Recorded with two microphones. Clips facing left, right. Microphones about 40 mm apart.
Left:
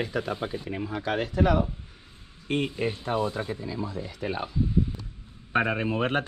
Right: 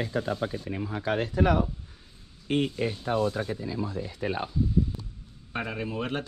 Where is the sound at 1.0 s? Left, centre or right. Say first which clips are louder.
Even; left.